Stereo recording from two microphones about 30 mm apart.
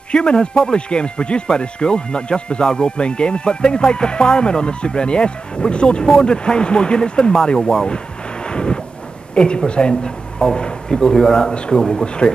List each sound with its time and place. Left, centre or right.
0.1 s speech: left
8.5 s a sound: left
9.3 s speech: left; by 11.5 s centre
11.5 s speech: left